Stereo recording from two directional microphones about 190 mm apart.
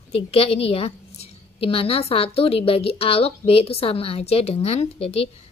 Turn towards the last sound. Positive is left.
turn(degrees=30)  # may be behind; listen again after turning